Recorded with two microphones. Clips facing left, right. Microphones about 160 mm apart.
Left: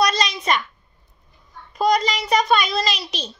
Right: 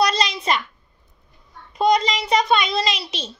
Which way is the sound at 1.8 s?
25° right (ahead or behind).